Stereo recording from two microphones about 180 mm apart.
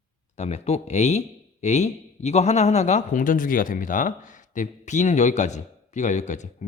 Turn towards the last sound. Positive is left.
turn(degrees=40)  # may be behind; listen again after turning